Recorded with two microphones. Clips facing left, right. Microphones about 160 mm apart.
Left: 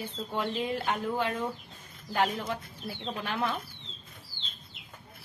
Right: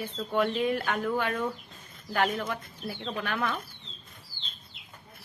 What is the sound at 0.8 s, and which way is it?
A woman's voice, 25° left (ahead or behind).